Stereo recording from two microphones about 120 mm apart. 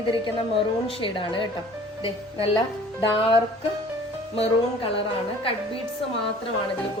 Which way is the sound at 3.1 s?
50° left (ahead or behind).